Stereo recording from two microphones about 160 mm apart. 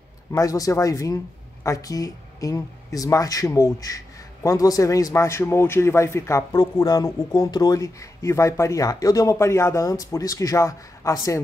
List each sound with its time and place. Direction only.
0.3 s speech: 20° left (ahead or behind)